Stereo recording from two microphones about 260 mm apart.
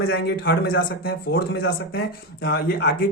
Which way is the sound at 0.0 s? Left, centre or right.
Left.